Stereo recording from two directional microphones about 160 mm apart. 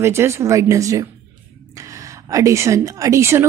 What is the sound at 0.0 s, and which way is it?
A woman's voice, 15° right (ahead or behind).